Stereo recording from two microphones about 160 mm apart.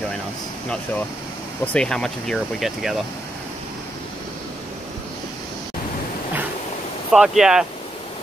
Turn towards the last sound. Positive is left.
turn(degrees=-5)  # may be behind; listen again after turning